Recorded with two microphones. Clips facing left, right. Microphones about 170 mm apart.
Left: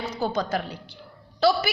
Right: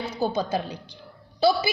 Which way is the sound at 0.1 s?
10° right (ahead or behind).